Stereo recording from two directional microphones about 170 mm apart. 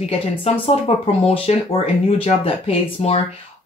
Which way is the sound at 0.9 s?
35° left (ahead or behind).